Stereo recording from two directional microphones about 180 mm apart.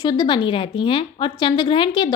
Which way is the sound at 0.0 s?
25° left (ahead or behind).